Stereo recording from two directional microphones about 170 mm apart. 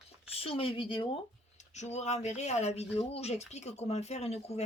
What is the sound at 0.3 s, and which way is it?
Speech, 35° left (ahead or behind).